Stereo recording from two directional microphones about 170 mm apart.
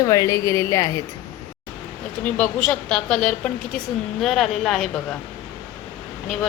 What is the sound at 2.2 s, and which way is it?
A woman's voice, 5° left (ahead or behind).